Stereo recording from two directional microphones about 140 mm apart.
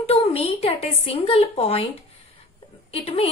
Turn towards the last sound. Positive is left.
turn(degrees=45)  # may be behind; listen again after turning